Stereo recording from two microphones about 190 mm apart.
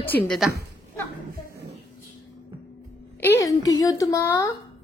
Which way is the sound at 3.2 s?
15° left (ahead or behind).